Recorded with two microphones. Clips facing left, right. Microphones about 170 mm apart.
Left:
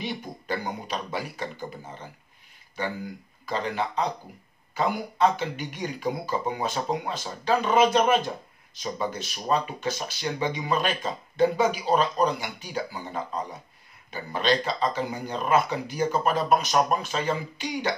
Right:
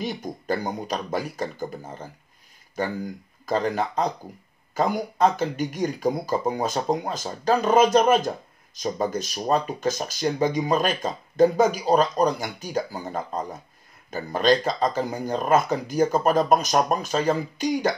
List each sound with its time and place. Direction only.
0.0 s speech: 40° right (ahead or behind)
3.4 s speech: 45° right (ahead or behind)